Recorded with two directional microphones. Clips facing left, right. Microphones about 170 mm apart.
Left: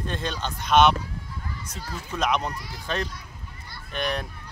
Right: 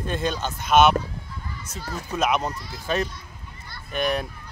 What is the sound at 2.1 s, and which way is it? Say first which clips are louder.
Speech: right 2 dB; 5° right (ahead or behind).